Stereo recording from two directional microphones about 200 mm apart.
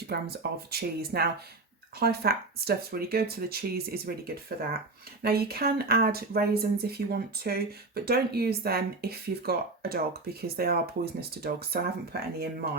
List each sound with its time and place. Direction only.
0.1 s speech: 50° right (ahead or behind)